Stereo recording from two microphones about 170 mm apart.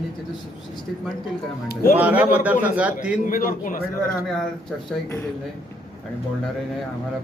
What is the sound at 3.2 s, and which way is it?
Speech, 55° left (ahead or behind).